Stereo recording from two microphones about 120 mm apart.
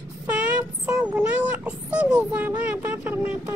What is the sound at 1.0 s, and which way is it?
Speech, 10° right (ahead or behind).